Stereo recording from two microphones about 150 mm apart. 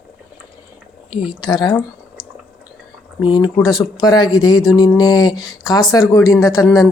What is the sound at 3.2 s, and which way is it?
Speech, 25° left (ahead or behind).